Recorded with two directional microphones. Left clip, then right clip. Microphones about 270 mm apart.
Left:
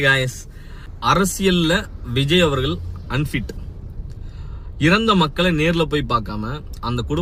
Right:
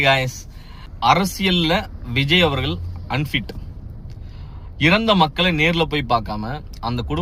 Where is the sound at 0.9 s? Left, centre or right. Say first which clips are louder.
Right 1 dB; centre.